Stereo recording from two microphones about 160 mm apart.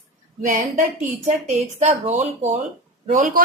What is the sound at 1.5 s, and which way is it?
A woman's voice, 50° right (ahead or behind).